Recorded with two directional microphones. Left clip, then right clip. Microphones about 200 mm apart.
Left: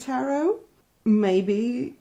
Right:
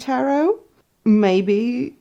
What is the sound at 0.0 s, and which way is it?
Speech, 35° right (ahead or behind).